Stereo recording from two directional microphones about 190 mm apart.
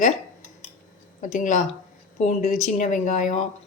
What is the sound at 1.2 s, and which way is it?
Speech, 40° left (ahead or behind).